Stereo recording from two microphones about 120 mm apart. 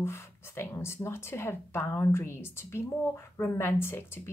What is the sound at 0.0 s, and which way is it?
Speech, 20° left (ahead or behind).